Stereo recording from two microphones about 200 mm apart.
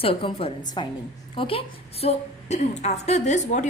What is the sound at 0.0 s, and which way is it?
A woman's voice, 25° left (ahead or behind).